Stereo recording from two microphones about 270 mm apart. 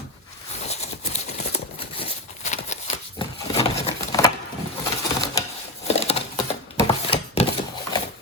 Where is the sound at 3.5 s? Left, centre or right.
Centre.